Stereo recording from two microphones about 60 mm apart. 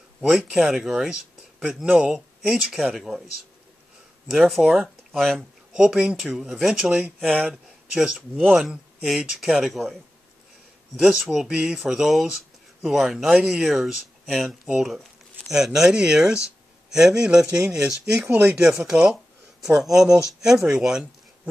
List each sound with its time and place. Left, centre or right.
0.2 s speech: centre
4.3 s speech: centre
5.9 s speech: centre
8.5 s speech: centre
11.0 s speech: centre